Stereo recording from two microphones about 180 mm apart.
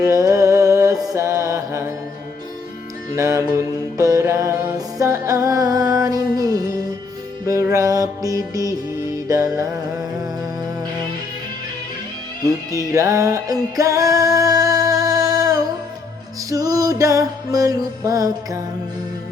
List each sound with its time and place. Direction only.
0.0 s music: 20° right (ahead or behind)
1.1 s mantra: 15° right (ahead or behind)
3.2 s mantra: 15° right (ahead or behind)
4.9 s music: 15° right (ahead or behind)
12.9 s music: 20° right (ahead or behind)